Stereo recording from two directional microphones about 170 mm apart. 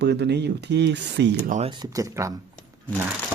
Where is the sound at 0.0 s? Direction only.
75° right (ahead or behind); by 1.3 s 90° right.